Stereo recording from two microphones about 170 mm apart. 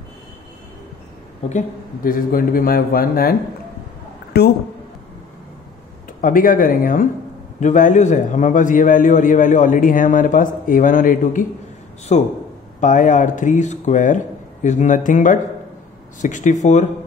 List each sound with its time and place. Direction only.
2.0 s a man's voice: 55° left (ahead or behind)
6.2 s a man's voice: 55° left (ahead or behind)
12.1 s a man's voice: 40° left (ahead or behind)